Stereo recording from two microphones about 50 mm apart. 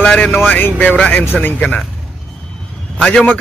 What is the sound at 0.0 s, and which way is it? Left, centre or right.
Speech, left.